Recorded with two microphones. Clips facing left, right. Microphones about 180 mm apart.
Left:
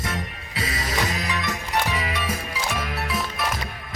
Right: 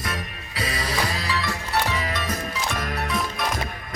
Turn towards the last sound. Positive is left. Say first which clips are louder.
# right 1 dB
turn(degrees=5)  # may be behind; listen again after turning